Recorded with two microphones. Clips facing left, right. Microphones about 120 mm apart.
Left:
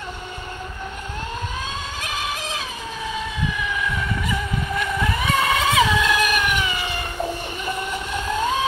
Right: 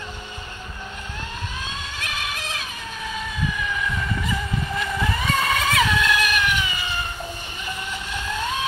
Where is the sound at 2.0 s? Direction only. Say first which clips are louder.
Left 3 dB; 35° left (ahead or behind).